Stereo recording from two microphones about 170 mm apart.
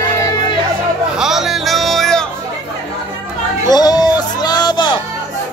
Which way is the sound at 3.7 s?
25° left (ahead or behind).